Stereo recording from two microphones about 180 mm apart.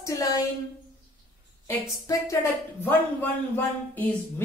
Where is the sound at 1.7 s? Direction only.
15° left (ahead or behind).